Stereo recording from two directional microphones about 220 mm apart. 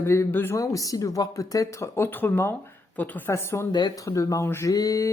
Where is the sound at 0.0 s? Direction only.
10° left (ahead or behind).